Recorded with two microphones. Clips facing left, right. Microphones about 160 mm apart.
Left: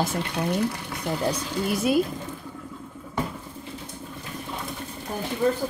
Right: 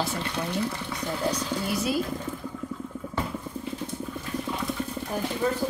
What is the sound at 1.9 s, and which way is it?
Speech, 55° left (ahead or behind).